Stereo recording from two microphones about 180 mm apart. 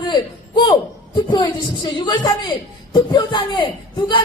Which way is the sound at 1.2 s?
25° left (ahead or behind).